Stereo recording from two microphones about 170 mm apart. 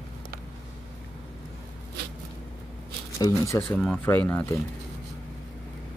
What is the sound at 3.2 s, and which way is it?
Speech, 20° left (ahead or behind).